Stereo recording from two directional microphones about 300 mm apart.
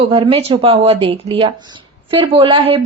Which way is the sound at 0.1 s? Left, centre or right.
Centre.